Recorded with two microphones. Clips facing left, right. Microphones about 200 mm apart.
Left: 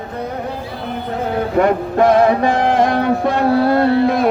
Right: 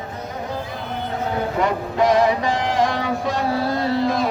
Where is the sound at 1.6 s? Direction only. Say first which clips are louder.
Left 5 dB; 55° left (ahead or behind).